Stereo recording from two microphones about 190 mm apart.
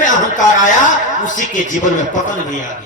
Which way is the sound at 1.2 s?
40° left (ahead or behind).